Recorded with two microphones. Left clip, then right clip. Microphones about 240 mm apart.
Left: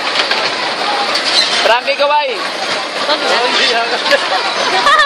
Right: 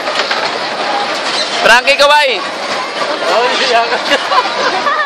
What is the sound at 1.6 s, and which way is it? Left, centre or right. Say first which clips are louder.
Speech: right 4 dB; right.